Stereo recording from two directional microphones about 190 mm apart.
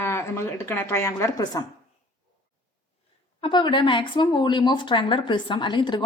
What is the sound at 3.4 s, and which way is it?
Speech, 25° left (ahead or behind).